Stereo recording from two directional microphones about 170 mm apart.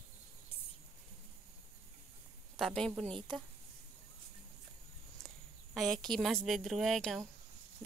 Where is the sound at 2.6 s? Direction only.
Centre (ahead or behind).